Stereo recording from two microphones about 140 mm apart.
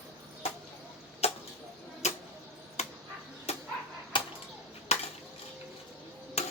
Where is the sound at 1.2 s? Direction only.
45° left (ahead or behind).